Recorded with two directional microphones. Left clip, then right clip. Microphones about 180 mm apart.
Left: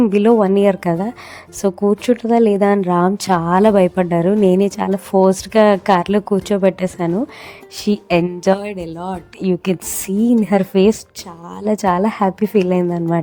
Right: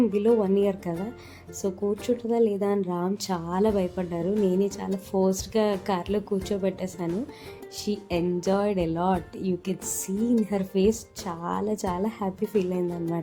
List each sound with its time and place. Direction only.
0.0 s speech: 40° left (ahead or behind)
8.6 s a woman's voice: 5° right (ahead or behind)
9.0 s a woman's voice: 5° left (ahead or behind)
9.4 s speech: 45° left (ahead or behind)
11.3 s a woman's voice: 5° left (ahead or behind)
11.6 s a woman's voice: 40° left (ahead or behind)